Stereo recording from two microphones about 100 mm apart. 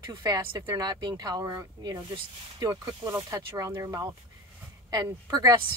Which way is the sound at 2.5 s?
40° right (ahead or behind).